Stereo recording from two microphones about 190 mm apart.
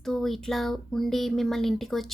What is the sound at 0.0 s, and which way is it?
Speech, centre (ahead or behind).